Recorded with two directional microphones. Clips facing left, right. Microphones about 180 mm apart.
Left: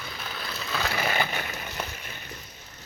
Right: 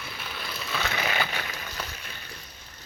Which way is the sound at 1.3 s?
45° left (ahead or behind).